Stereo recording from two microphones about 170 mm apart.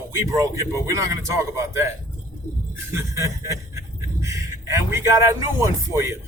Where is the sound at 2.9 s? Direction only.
15° right (ahead or behind).